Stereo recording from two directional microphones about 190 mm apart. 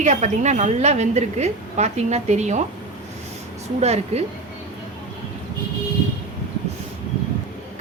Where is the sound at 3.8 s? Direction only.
35° right (ahead or behind).